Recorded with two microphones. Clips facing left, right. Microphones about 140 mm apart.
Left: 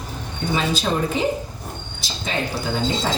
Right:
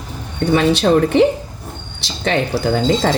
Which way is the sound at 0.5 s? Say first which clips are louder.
Right 9 dB; 70° right (ahead or behind).